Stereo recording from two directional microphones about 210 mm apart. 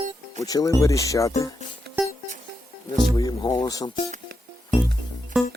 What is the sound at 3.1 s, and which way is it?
Speech, 15° left (ahead or behind).